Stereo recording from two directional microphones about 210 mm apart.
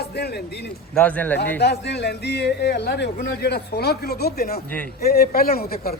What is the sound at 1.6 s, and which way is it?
A man's voice, 50° left (ahead or behind).